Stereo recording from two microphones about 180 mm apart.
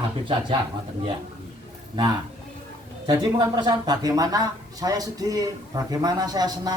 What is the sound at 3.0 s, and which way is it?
Speech, 20° right (ahead or behind).